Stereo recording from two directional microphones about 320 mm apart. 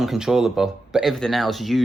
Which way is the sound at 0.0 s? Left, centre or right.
Centre.